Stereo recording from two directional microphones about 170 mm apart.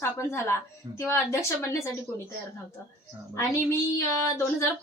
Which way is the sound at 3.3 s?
15° left (ahead or behind).